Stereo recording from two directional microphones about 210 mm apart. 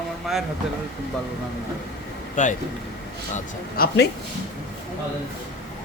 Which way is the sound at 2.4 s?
35° left (ahead or behind).